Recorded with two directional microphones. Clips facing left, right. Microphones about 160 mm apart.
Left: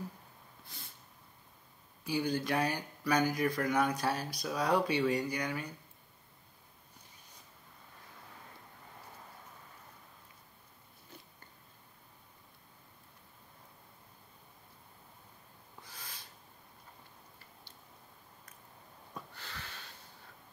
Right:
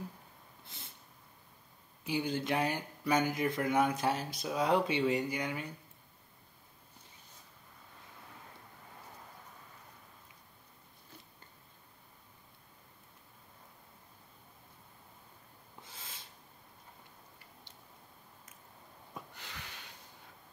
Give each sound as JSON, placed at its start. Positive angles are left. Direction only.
{"t": 0.7, "sound": "snort", "side_deg": -25}
{"t": 2.0, "sound": "speech", "side_deg": -20}
{"t": 15.8, "sound": "owl", "side_deg": -25}
{"t": 19.1, "sound": "sniff", "side_deg": -15}